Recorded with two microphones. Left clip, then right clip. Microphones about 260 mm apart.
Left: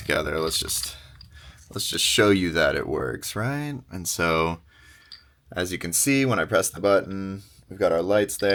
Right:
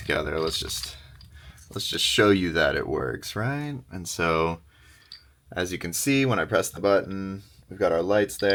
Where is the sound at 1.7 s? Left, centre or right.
Centre.